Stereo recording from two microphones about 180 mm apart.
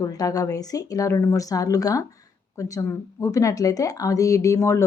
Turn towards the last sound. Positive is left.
turn(degrees=15)  # may be behind; listen again after turning